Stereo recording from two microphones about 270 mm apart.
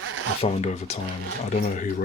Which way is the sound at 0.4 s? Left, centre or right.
Left.